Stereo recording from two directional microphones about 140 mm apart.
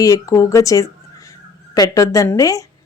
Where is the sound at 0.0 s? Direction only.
25° left (ahead or behind).